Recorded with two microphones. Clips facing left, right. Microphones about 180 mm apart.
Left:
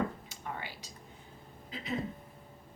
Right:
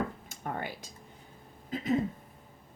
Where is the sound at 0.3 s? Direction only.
50° right (ahead or behind).